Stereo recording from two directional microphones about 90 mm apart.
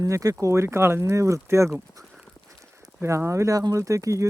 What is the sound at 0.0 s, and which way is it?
Speech, 40° right (ahead or behind).